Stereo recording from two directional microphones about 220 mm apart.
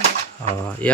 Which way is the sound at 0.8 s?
5° left (ahead or behind).